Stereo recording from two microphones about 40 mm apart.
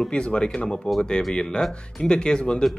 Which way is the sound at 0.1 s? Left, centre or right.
Left.